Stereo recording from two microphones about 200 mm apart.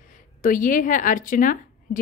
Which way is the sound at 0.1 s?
40° left (ahead or behind).